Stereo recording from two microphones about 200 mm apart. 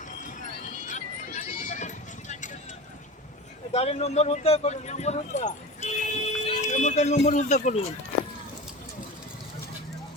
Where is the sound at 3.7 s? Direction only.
30° left (ahead or behind).